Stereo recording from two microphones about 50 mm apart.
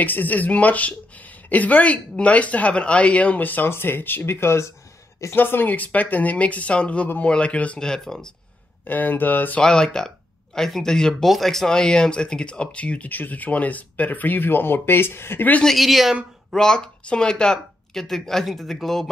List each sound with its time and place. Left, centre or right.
0.0 s speech: left
5.3 s speech: left
7.8 s speech: centre
8.8 s speech: left
9.6 s speech: centre; by 15.4 s left
15.6 s speech: centre
16.5 s speech: centre